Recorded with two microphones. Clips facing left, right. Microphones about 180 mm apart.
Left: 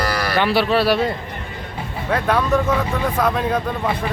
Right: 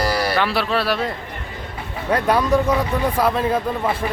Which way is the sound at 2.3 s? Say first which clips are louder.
Right 1 dB; 10° right (ahead or behind).